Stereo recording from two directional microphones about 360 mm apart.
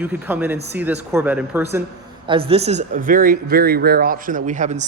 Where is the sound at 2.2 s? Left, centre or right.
Centre.